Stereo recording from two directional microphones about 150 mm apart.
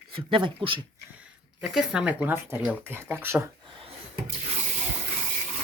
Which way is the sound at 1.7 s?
5° right (ahead or behind).